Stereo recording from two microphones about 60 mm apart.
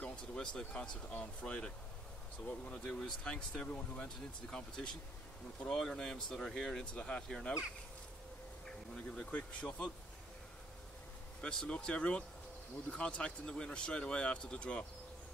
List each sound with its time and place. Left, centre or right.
0.0 s speech: centre
2.7 s speech: centre
8.6 s speech: centre
11.4 s speech: centre